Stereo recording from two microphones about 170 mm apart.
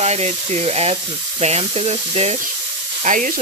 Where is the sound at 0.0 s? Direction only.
40° right (ahead or behind).